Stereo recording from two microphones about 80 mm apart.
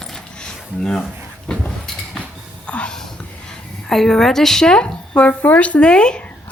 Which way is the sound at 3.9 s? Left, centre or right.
Centre.